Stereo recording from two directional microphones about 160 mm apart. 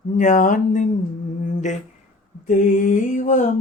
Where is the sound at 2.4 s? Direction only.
50° left (ahead or behind).